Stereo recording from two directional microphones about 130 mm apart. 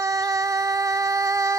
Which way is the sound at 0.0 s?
25° right (ahead or behind).